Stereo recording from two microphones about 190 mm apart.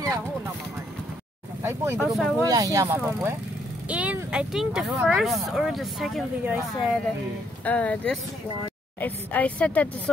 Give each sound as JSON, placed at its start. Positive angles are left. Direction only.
{"t": 1.6, "sound": "speech", "side_deg": -15}
{"t": 2.0, "sound": "speech", "side_deg": 0}
{"t": 2.5, "sound": "speech", "side_deg": -15}
{"t": 7.6, "sound": "speech", "side_deg": 5}